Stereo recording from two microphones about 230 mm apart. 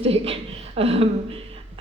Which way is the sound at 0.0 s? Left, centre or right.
Right.